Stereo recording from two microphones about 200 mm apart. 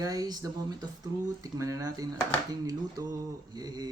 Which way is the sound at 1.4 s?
15° right (ahead or behind).